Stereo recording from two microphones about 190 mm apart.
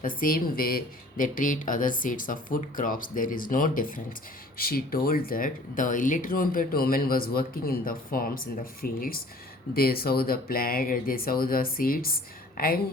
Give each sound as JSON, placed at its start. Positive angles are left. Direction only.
{"t": 0.0, "sound": "speech", "side_deg": 45}